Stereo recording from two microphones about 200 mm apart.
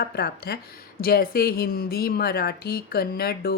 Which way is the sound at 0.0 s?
50° left (ahead or behind).